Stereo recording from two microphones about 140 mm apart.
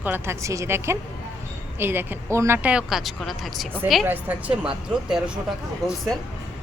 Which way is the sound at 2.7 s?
Centre (ahead or behind).